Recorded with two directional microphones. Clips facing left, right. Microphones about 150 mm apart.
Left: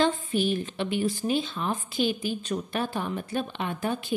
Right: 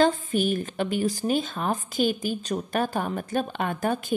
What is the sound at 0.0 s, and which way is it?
A woman's voice, 45° right (ahead or behind).